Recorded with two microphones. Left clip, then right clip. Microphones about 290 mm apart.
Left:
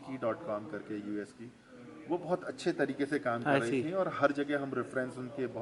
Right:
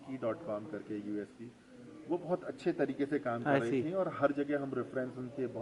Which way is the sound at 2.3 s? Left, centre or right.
Centre.